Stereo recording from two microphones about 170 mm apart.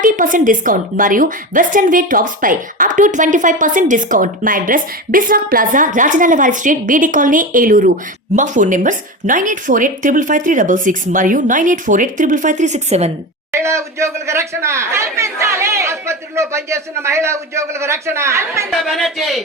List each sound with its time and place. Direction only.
0.0 s a woman's voice: 50° right (ahead or behind)
13.5 s speech: 15° right (ahead or behind)
18.7 s speech: centre (ahead or behind)